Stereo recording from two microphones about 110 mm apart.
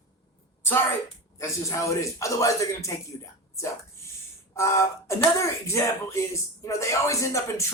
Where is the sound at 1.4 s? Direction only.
25° left (ahead or behind).